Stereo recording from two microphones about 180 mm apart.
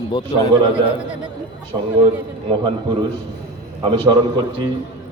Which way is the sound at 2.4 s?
30° right (ahead or behind).